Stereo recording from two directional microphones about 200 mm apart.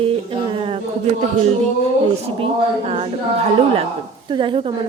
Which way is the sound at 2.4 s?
30° right (ahead or behind).